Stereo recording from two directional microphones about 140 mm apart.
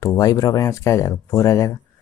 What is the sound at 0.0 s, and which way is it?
Speech, 25° left (ahead or behind).